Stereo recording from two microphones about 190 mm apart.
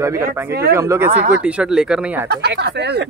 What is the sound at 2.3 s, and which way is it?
Speech, 60° right (ahead or behind).